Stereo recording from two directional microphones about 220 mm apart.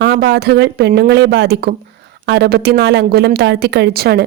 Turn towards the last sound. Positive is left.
turn(degrees=-45)  # may be behind; listen again after turning